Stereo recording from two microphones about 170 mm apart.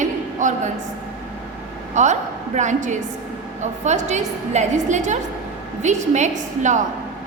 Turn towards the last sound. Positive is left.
turn(degrees=-45)  # may be behind; listen again after turning